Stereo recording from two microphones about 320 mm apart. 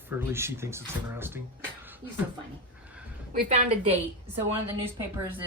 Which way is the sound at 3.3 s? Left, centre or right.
Right.